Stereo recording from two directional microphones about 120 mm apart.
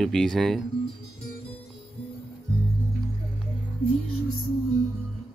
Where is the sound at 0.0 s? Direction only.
5° left (ahead or behind).